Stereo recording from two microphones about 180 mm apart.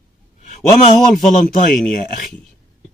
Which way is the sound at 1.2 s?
45° left (ahead or behind).